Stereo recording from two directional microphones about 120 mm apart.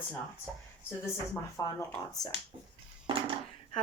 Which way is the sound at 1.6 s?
30° left (ahead or behind).